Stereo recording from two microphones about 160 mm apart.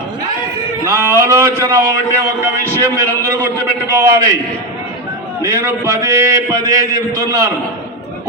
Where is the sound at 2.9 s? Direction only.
15° right (ahead or behind).